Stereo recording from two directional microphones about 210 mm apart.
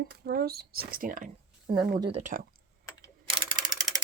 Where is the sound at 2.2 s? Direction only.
40° right (ahead or behind).